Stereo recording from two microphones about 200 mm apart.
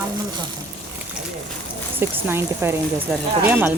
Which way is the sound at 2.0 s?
10° right (ahead or behind).